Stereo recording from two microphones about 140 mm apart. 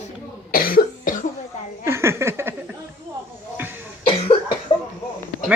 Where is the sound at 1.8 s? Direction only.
20° right (ahead or behind).